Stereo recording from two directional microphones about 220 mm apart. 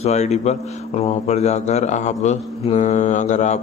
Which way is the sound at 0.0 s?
30° left (ahead or behind).